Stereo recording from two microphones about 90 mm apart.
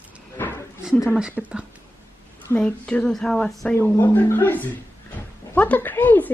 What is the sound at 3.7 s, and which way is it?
A woman's voice, 25° left (ahead or behind).